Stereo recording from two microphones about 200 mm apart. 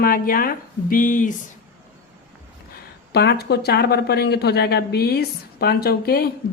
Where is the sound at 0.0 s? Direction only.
45° left (ahead or behind).